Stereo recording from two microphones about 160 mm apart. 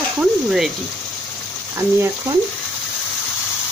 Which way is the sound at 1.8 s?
15° right (ahead or behind).